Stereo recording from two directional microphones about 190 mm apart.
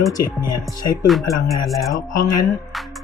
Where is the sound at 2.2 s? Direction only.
20° left (ahead or behind).